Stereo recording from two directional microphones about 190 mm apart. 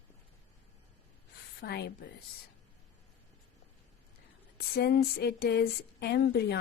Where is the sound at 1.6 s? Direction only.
60° left (ahead or behind).